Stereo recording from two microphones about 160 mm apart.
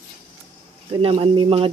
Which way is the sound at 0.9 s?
35° right (ahead or behind).